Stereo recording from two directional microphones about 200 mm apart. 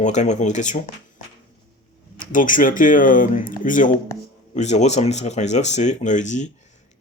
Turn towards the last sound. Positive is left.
turn(degrees=35)  # may be behind; listen again after turning